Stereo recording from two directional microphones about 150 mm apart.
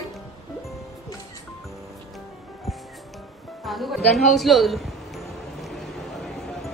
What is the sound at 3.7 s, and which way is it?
A man's voice, centre (ahead or behind).